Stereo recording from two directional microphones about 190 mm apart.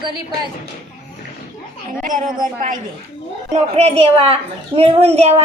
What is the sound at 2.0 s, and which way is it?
A woman's voice, 45° right (ahead or behind).